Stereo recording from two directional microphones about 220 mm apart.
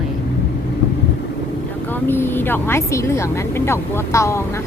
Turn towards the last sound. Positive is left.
turn(degrees=15)  # may be behind; listen again after turning